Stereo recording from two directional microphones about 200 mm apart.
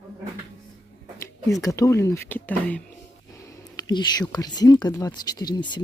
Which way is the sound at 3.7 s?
20° left (ahead or behind).